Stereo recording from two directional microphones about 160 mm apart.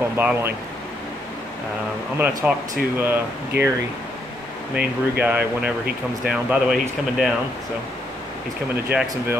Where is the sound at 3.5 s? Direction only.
90° right.